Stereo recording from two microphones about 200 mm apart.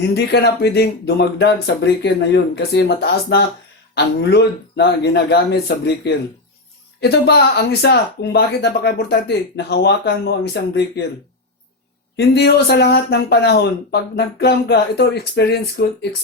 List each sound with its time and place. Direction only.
0.1 s speech: 55° left (ahead or behind)
12.1 s speech: 55° left (ahead or behind)